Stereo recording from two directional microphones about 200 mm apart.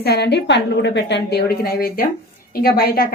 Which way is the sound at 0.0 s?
55° left (ahead or behind).